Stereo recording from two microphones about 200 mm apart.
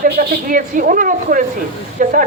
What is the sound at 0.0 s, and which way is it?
A woman's voice, 45° right (ahead or behind).